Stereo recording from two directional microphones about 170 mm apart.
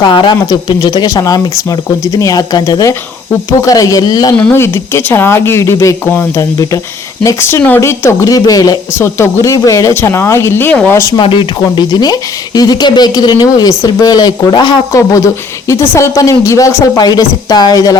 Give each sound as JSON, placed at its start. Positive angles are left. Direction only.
{"t": 0.0, "sound": "speech", "side_deg": 25}
{"t": 4.4, "sound": "speech", "side_deg": 10}
{"t": 11.2, "sound": "speech", "side_deg": 30}